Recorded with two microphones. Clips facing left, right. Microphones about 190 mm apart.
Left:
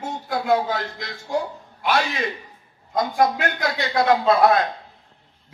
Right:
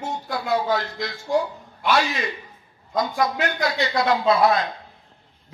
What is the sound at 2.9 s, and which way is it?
A man's voice, 50° left (ahead or behind).